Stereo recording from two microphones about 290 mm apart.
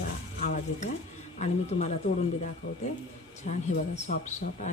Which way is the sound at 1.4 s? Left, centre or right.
Left.